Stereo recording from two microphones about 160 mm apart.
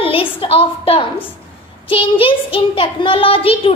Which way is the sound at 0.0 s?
35° left (ahead or behind).